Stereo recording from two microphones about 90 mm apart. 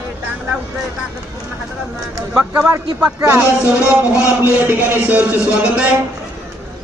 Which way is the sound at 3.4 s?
35° left (ahead or behind).